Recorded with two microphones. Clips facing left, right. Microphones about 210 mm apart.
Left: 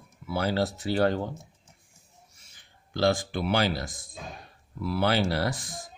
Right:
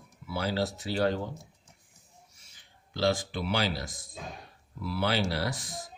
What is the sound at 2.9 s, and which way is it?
Speech, 50° left (ahead or behind).